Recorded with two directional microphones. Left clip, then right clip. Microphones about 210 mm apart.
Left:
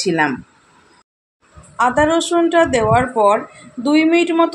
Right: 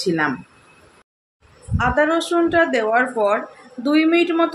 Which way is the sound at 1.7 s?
20° left (ahead or behind).